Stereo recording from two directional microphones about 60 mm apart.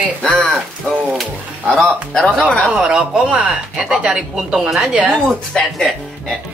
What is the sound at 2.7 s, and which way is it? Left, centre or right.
Speech, centre.